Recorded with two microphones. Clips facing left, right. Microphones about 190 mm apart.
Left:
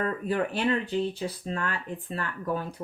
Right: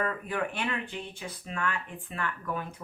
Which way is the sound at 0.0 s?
35° left (ahead or behind).